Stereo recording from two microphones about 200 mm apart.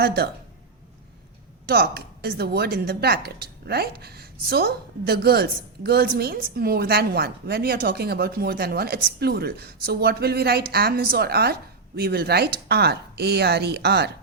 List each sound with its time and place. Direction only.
0.0 s a woman's voice: 50° right (ahead or behind)
1.6 s a woman's voice: 50° right (ahead or behind)